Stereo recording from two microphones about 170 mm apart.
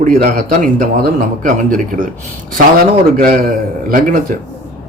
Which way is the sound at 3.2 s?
55° right (ahead or behind).